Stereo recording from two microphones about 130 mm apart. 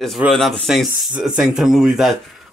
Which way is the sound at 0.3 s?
5° left (ahead or behind).